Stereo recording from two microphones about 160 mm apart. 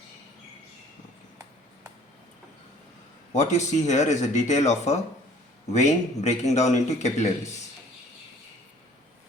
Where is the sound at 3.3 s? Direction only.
45° left (ahead or behind).